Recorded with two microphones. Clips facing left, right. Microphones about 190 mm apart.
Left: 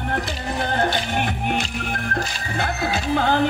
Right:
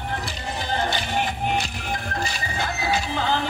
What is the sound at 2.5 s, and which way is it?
Music, 60° left (ahead or behind).